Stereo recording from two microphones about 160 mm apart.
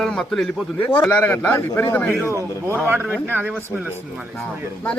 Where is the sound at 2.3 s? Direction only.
15° right (ahead or behind).